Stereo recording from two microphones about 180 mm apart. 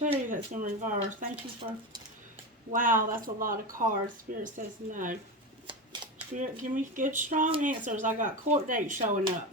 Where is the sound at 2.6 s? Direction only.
50° right (ahead or behind).